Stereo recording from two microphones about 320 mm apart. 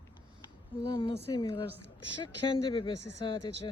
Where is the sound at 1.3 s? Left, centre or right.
Centre.